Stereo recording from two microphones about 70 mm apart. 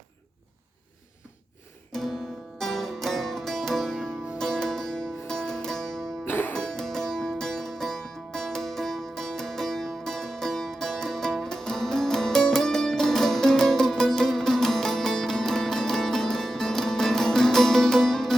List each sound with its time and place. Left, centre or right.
1.9 s music: centre
6.2 s music: left
6.5 s music: centre